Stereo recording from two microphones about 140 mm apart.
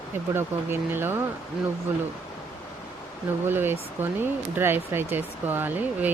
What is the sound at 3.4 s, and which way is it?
Speech, 15° right (ahead or behind).